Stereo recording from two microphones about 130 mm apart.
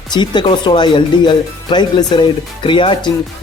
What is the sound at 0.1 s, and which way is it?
Speech, 35° left (ahead or behind).